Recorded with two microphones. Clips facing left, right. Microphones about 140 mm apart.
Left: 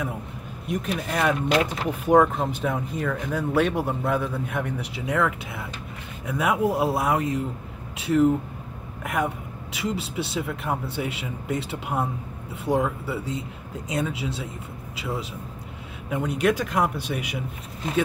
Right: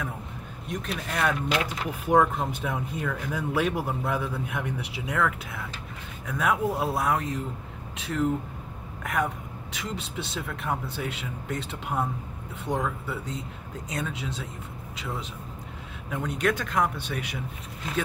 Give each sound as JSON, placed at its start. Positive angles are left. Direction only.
{"t": 0.7, "sound": "speech", "side_deg": 5}
{"t": 1.6, "sound": "speech", "side_deg": 25}
{"t": 2.1, "sound": "speech", "side_deg": -5}